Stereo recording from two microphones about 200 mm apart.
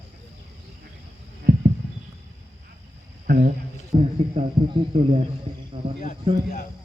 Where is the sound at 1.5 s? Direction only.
50° right (ahead or behind).